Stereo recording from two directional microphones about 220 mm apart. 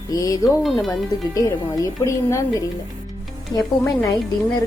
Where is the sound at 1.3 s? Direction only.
15° left (ahead or behind).